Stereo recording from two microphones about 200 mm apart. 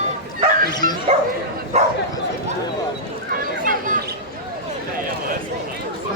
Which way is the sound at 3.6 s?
45° right (ahead or behind).